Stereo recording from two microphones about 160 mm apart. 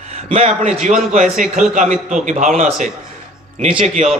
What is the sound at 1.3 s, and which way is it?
Speech, 50° right (ahead or behind).